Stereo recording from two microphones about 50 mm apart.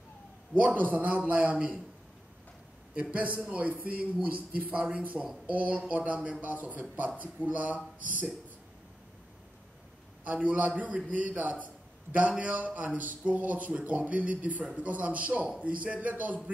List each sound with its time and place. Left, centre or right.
0.6 s a man's voice: right
2.9 s a man's voice: right
5.2 s speech: centre
5.5 s a man's voice: right
10.2 s a man's voice: right